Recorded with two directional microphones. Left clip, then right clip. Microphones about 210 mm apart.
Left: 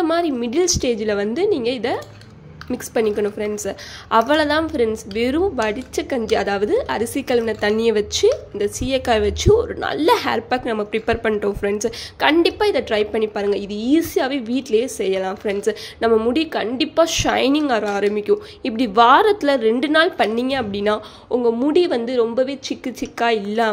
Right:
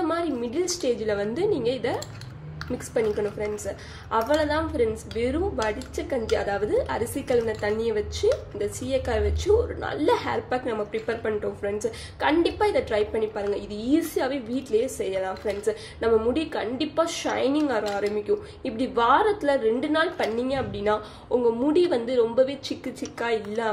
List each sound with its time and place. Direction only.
0.0 s a woman's voice: 40° left (ahead or behind)